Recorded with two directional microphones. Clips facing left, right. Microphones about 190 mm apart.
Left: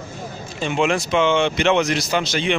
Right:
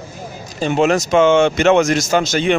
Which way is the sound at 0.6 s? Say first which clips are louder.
Right 5 dB; 40° right (ahead or behind).